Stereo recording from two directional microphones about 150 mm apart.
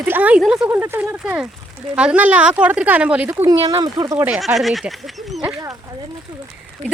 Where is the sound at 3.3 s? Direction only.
25° right (ahead or behind).